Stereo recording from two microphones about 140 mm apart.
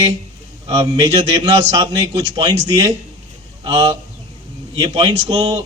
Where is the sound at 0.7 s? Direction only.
30° right (ahead or behind).